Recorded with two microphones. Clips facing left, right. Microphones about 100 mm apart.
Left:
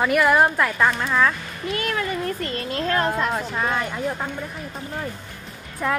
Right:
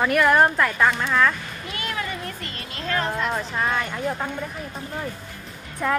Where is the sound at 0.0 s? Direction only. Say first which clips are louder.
Even; 5° left (ahead or behind).